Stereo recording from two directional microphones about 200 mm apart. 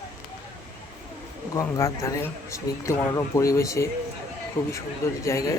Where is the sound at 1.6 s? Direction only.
15° left (ahead or behind).